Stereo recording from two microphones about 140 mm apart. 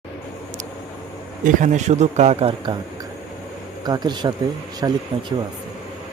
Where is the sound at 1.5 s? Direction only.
60° right (ahead or behind); by 2.7 s 40° right (ahead or behind).